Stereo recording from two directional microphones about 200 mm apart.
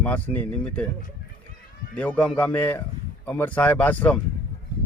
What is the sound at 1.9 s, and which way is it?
Speech, 5° left (ahead or behind).